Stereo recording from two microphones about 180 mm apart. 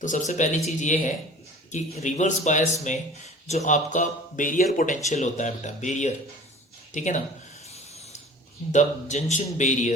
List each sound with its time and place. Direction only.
0.0 s speech: 45° left (ahead or behind)
8.7 s speech: 40° left (ahead or behind)